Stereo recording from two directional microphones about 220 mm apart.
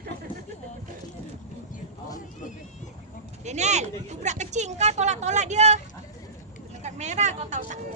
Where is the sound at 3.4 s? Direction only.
30° right (ahead or behind).